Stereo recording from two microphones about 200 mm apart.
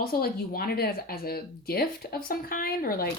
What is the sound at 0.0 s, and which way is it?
Speech, 50° left (ahead or behind).